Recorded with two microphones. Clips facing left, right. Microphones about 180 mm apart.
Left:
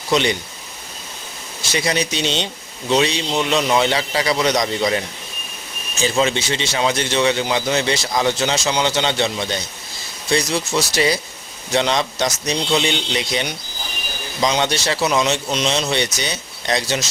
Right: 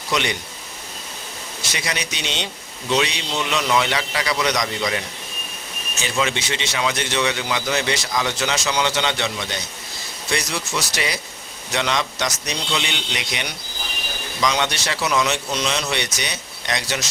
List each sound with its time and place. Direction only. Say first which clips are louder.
0.1 s a man's voice: left 5 dB; 30° left (ahead or behind)
1.7 s a man's voice: left 8 dB; 30° left (ahead or behind)
6.0 s a man's voice: left 5 dB; 35° left (ahead or behind)
14.4 s speech: left 3 dB; 30° left (ahead or behind)